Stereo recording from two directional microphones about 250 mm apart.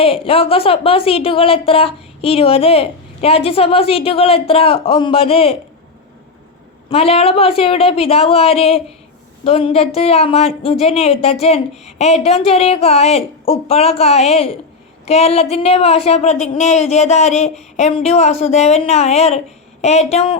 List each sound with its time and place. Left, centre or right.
0.0 s a woman's voice: left
6.9 s a woman's voice: left